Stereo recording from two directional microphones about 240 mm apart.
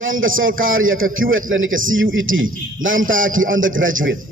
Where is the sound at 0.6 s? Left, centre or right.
Right.